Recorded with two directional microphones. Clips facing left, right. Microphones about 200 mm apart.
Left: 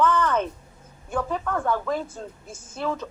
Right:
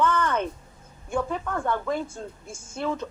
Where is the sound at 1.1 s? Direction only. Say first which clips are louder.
Left 1 dB; 10° right (ahead or behind).